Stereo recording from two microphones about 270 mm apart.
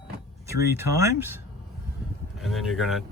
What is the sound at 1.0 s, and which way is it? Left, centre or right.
Speech, centre.